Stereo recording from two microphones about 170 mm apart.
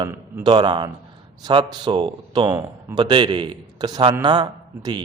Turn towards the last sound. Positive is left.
turn(degrees=-25)  # may be behind; listen again after turning